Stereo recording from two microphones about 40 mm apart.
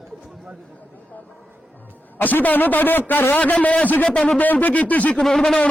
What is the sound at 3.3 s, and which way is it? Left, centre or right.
Speech, left.